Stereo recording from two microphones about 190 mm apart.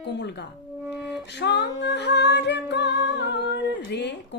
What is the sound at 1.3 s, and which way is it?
Singing, 65° left (ahead or behind).